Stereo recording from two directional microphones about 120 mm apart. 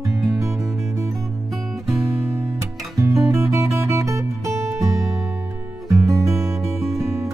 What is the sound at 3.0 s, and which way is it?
Music, 25° right (ahead or behind).